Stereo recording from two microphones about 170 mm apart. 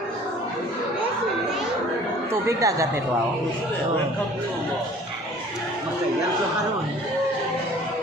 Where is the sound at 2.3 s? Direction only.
20° right (ahead or behind).